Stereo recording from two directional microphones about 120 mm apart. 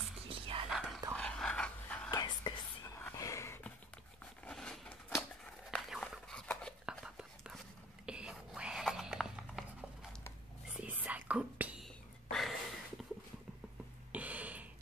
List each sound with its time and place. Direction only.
0.3 s whispering: 50° right (ahead or behind)
0.7 s whispering: centre (ahead or behind)
1.1 s dog: 10° left (ahead or behind)
2.0 s whispering: 35° left (ahead or behind)
3.0 s a sound: 25° left (ahead or behind)
4.5 s a sound: 10° left (ahead or behind)
6.9 s whispering: 5° right (ahead or behind)
11.8 s whispering: centre (ahead or behind)
14.1 s a sound: 10° right (ahead or behind)